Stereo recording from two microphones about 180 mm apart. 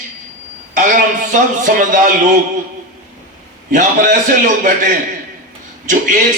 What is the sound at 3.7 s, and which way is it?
Speech, 45° right (ahead or behind).